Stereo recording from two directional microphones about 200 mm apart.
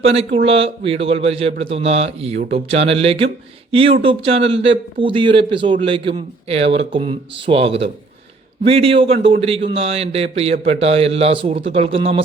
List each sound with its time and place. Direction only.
0.0 s a man's voice: 30° right (ahead or behind)